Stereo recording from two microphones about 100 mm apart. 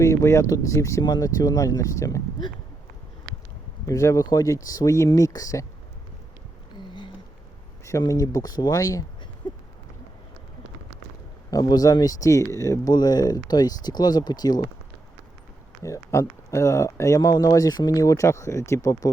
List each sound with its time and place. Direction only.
0.0 s speech: 30° left (ahead or behind)
3.8 s speech: 30° left (ahead or behind)
6.7 s a sound: 50° left (ahead or behind)
7.9 s speech: 35° left (ahead or behind)
9.4 s a sound: 50° left (ahead or behind)
11.5 s speech: 35° left (ahead or behind)
12.9 s speech: 45° left (ahead or behind)
15.8 s speech: 30° left (ahead or behind)